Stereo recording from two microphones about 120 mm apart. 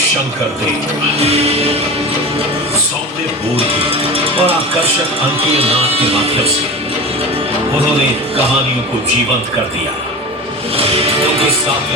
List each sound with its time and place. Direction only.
1.2 s music: 60° right (ahead or behind)
3.5 s speech: 55° right (ahead or behind)
10.8 s music: 55° right (ahead or behind)